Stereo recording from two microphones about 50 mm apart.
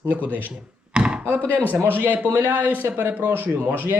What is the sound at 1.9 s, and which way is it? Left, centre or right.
Speech, right.